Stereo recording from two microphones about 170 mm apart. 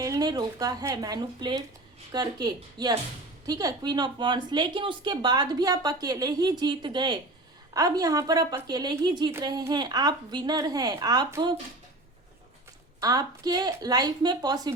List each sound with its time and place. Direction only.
0.0 s speech: 20° right (ahead or behind)
13.0 s speech: 20° right (ahead or behind)